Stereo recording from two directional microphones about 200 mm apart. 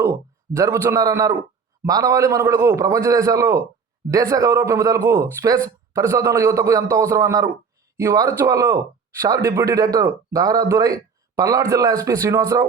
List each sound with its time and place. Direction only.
0.0 s a man's voice: 15° right (ahead or behind)